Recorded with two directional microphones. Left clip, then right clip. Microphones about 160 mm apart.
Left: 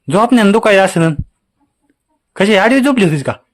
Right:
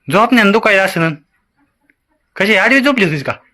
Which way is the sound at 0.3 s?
40° left (ahead or behind).